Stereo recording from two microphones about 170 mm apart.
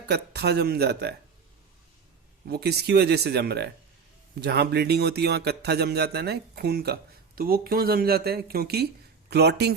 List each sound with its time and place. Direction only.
0.1 s speech: 75° right (ahead or behind)
2.5 s speech: 75° right (ahead or behind)